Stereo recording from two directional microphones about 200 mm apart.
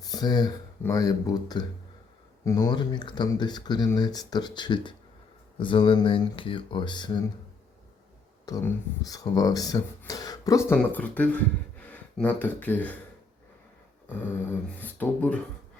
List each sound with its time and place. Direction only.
0.0 s speech: 20° left (ahead or behind)
8.4 s speech: 15° left (ahead or behind)
14.1 s speech: 10° left (ahead or behind)